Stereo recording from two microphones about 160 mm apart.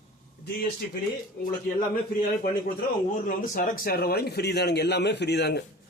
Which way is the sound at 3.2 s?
60° left (ahead or behind).